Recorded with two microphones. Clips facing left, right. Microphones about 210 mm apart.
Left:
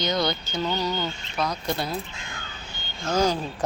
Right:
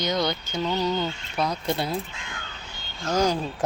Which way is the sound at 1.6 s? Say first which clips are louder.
Right 1 dB; 25° right (ahead or behind).